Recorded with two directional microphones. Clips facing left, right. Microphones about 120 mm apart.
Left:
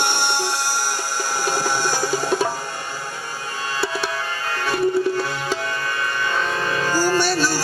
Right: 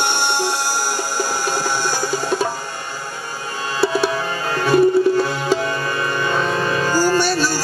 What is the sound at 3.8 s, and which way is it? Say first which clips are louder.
Music: right 9 dB; 10° right (ahead or behind).